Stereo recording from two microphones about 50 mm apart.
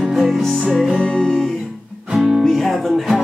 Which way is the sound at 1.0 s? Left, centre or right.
Centre.